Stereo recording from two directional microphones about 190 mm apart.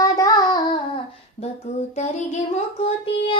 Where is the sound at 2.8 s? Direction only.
30° left (ahead or behind).